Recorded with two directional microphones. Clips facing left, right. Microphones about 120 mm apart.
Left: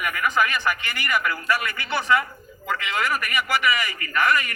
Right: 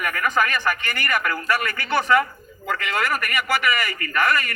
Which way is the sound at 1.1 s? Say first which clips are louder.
Even; 50° right (ahead or behind).